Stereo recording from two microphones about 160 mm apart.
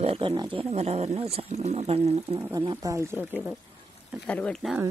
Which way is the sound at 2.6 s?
30° right (ahead or behind).